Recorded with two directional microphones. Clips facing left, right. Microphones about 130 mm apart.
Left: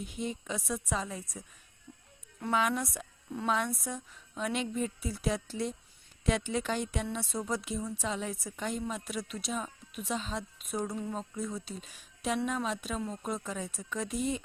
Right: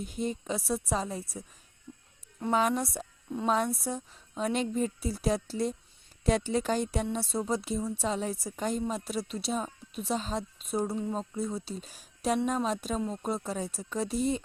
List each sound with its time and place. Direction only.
0.0 s a woman's voice: 40° right (ahead or behind)
2.5 s a woman's voice: 35° right (ahead or behind)